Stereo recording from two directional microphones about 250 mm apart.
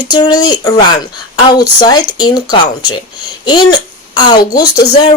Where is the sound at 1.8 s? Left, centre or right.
Centre.